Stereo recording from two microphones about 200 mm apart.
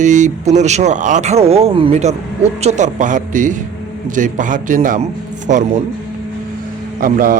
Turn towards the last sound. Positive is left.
turn(degrees=-45)  # may be behind; listen again after turning